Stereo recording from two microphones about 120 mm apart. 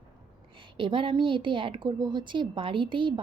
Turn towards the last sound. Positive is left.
turn(degrees=-45)  # may be behind; listen again after turning